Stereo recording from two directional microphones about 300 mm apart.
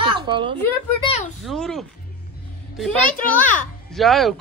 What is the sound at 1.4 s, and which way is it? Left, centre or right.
A child's voice, centre.